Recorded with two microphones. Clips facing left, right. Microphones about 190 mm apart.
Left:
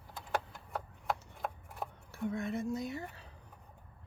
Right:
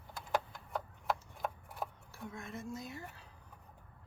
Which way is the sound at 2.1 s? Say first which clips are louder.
Left 10 dB; 65° left (ahead or behind).